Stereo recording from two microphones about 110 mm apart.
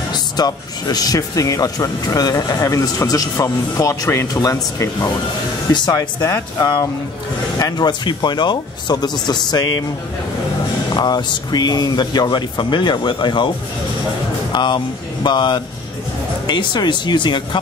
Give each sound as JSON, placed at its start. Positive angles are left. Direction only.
{"t": 0.1, "sound": "speech", "side_deg": 35}
{"t": 11.0, "sound": "speech", "side_deg": 40}
{"t": 14.5, "sound": "speech", "side_deg": 45}